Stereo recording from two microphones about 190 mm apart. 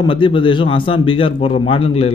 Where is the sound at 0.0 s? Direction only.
25° left (ahead or behind).